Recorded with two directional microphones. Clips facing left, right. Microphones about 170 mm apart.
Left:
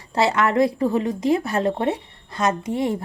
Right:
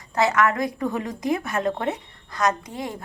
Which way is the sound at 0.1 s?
30° left (ahead or behind).